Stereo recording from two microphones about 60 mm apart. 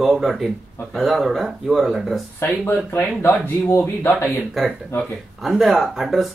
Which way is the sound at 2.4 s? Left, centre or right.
Left.